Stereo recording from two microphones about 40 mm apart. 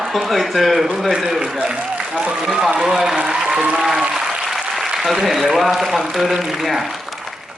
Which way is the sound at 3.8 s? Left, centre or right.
Centre.